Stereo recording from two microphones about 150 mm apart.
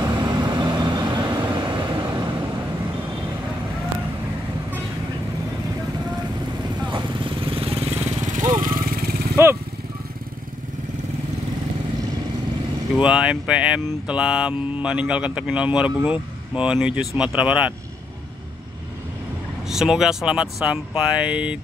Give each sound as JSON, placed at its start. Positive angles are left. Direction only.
{"t": 0.0, "sound": "vehicle", "side_deg": -30}
{"t": 6.9, "sound": "vehicle", "side_deg": -35}
{"t": 12.9, "sound": "speech", "side_deg": -5}
{"t": 19.7, "sound": "speech", "side_deg": -5}